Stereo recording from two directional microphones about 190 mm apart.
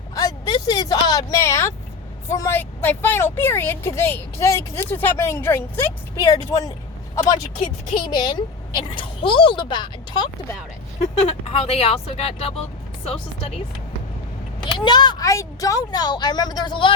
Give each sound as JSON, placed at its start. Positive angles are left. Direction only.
{"t": 0.1, "sound": "a woman's voice", "side_deg": 20}
{"t": 11.0, "sound": "speech", "side_deg": 35}
{"t": 14.8, "sound": "speech", "side_deg": 25}